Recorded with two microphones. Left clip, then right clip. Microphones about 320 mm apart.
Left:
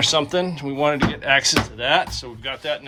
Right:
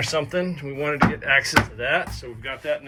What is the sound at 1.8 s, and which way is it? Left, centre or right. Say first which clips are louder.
Speech: left 4 dB; centre.